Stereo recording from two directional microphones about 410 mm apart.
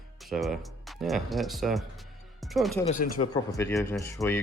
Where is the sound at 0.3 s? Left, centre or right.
Centre.